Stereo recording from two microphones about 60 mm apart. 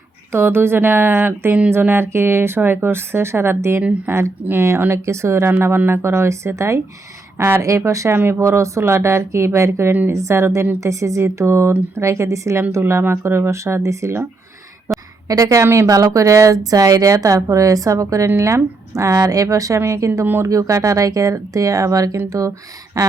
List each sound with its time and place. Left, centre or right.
0.3 s speech: right
7.3 s speech: right
7.6 s a woman's voice: right
8.1 s speech: right
8.4 s a woman's voice: right
12.9 s speech: right
15.4 s speech: right
15.9 s speech: right
18.3 s a woman's voice: right
19.8 s speech: right